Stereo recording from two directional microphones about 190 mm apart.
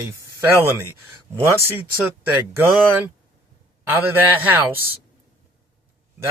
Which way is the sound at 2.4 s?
10° right (ahead or behind).